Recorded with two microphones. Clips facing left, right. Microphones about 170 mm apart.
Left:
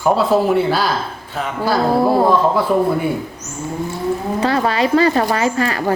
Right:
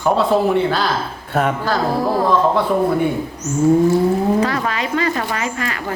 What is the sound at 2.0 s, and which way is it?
Speech, 30° left (ahead or behind).